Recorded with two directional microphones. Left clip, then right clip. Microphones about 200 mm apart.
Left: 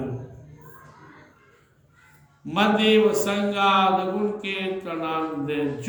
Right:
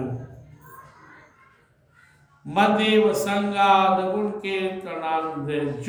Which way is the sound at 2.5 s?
20° right (ahead or behind).